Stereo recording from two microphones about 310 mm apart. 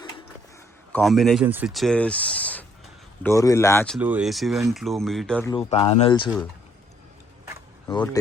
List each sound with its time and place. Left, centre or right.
0.9 s speech: centre
5.5 s speech: centre
7.9 s speech: centre